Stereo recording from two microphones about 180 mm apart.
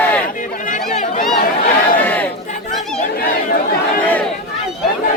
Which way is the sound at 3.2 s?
60° left (ahead or behind).